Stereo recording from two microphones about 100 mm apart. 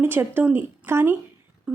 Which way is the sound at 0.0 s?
20° right (ahead or behind).